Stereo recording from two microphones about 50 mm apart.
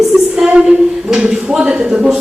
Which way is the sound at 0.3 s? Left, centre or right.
Centre.